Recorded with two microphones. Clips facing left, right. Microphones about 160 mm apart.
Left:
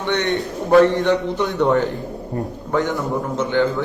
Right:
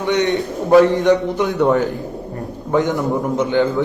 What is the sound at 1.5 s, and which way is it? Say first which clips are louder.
Speech: right 2 dB; centre (ahead or behind).